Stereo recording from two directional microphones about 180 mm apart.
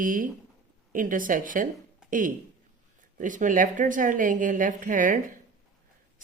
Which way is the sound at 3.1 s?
45° right (ahead or behind).